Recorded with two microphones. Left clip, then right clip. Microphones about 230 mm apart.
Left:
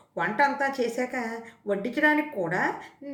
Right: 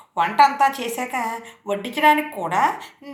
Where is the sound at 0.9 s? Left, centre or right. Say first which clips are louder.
Right 5 dB; left.